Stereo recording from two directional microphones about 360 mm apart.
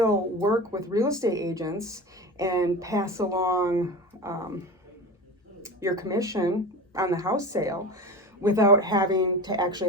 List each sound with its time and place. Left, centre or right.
0.4 s speech: centre
5.6 s speech: centre